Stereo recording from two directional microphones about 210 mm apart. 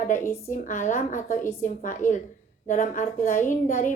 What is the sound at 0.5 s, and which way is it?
Speech, 35° left (ahead or behind).